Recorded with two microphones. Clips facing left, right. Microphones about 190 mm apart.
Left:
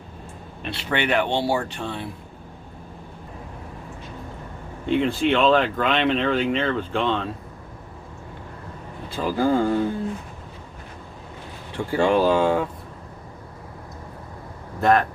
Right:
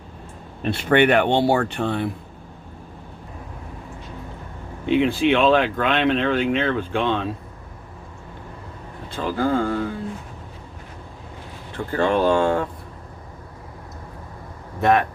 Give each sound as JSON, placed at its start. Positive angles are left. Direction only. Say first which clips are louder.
{"t": 0.6, "sound": "speech", "louder": "right 8 dB", "side_deg": -50}
{"t": 4.9, "sound": "speech", "louder": "right 2 dB", "side_deg": -5}
{"t": 9.1, "sound": "speech", "louder": "left 1 dB", "side_deg": 10}
{"t": 11.8, "sound": "speech", "louder": "left 1 dB", "side_deg": 10}
{"t": 14.8, "sound": "speech", "louder": "even", "side_deg": 0}